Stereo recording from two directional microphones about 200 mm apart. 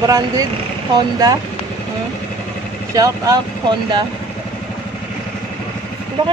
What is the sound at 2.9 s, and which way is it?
Speech, 15° right (ahead or behind).